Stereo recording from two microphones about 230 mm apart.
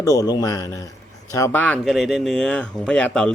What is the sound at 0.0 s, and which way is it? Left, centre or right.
Speech, centre.